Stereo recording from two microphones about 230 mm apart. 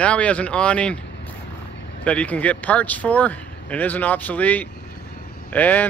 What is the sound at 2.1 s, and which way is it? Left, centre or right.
Speech, centre.